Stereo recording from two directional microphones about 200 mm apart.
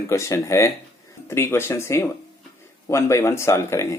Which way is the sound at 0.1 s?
15° left (ahead or behind).